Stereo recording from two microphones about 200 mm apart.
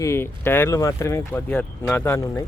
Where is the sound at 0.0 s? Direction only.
10° left (ahead or behind).